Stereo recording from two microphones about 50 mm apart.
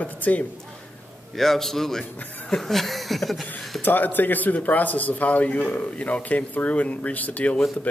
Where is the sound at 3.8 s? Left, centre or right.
Left.